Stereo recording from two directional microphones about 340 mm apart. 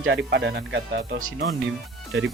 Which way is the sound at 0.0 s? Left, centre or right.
Right.